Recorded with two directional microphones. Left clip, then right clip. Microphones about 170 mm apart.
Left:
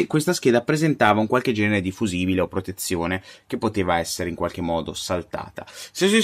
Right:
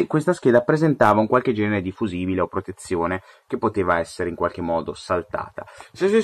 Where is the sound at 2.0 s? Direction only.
40° left (ahead or behind).